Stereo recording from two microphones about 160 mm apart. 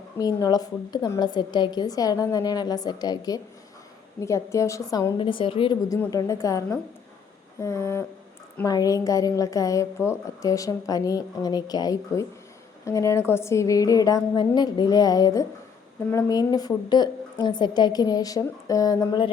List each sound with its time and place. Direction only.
0.2 s a woman's voice: 25° left (ahead or behind)
6.1 s a woman's voice: 20° left (ahead or behind)
7.6 s a sound: 15° left (ahead or behind)
8.5 s a woman's voice: 20° left (ahead or behind)